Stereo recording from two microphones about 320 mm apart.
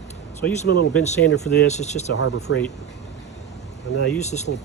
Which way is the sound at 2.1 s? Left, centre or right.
Left.